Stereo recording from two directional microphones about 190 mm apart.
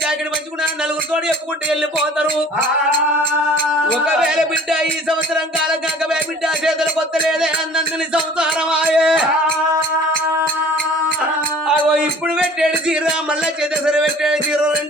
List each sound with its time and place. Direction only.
4.0 s music: 5° right (ahead or behind)
8.1 s music: 5° right (ahead or behind)
11.9 s music: 5° right (ahead or behind)